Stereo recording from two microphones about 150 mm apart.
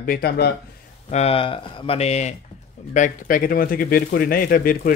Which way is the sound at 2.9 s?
60° left (ahead or behind).